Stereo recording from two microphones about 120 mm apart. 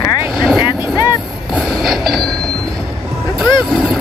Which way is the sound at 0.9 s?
35° left (ahead or behind).